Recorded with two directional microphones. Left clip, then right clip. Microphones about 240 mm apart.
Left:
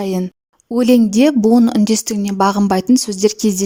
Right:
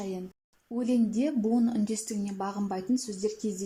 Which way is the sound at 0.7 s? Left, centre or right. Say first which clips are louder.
Left 16 dB; left.